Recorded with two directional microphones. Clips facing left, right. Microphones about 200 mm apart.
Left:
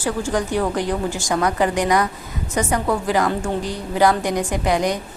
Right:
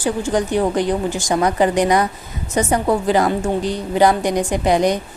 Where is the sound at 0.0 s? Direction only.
15° right (ahead or behind).